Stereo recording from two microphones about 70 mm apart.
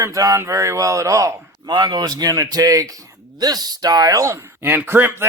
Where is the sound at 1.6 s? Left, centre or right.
Right.